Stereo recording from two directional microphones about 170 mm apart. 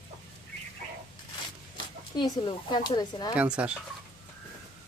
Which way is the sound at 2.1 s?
25° left (ahead or behind).